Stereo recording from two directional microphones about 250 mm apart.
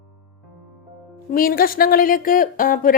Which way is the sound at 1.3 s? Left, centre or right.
Left.